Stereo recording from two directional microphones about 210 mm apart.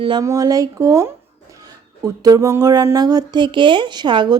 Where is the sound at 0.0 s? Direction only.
20° right (ahead or behind).